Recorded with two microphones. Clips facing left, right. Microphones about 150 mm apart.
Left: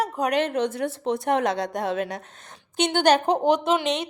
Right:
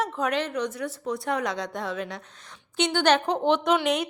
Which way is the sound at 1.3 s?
60° left (ahead or behind).